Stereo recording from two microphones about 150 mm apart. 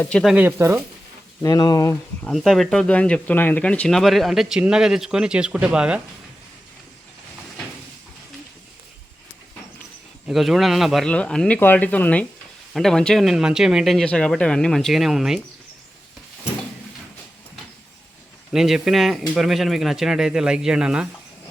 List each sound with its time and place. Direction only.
0.0 s speech: 5° left (ahead or behind)
0.3 s speech: 15° right (ahead or behind)
1.4 s speech: 20° left (ahead or behind)
2.2 s speech: centre (ahead or behind)
10.2 s speech: centre (ahead or behind)
18.5 s speech: centre (ahead or behind)